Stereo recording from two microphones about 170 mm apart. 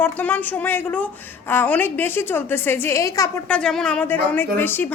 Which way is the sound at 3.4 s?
5° left (ahead or behind).